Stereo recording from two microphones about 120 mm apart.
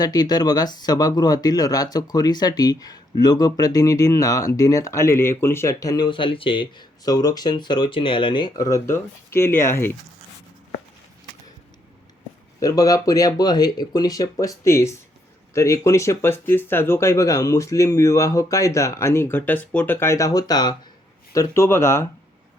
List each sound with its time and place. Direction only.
0.0 s speech: 35° left (ahead or behind)
6.1 s speech: 45° left (ahead or behind); by 9.9 s 20° left (ahead or behind)
12.5 s speech: 30° left (ahead or behind)
21.3 s speech: 20° left (ahead or behind)